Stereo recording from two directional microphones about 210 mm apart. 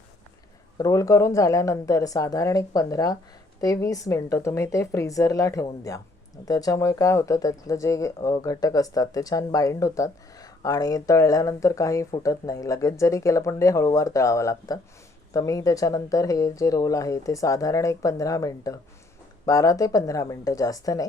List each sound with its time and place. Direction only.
0.8 s speech: 15° left (ahead or behind)